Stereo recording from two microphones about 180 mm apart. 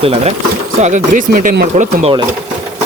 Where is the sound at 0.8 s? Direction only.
45° right (ahead or behind).